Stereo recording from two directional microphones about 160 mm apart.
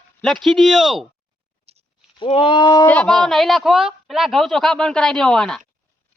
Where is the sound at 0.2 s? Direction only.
Centre (ahead or behind).